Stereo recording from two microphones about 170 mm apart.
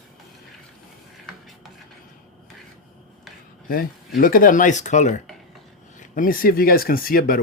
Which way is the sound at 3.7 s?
55° left (ahead or behind).